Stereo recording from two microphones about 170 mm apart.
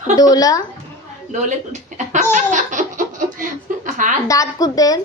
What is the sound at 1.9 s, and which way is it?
Speech, 45° right (ahead or behind).